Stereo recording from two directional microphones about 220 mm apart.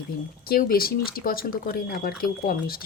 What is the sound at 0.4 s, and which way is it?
A woman's voice, 40° left (ahead or behind).